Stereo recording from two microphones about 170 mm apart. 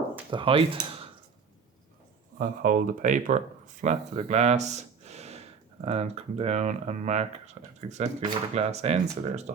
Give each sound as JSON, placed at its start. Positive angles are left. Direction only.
{"t": 0.3, "sound": "speech", "side_deg": -30}
{"t": 2.4, "sound": "speech", "side_deg": -55}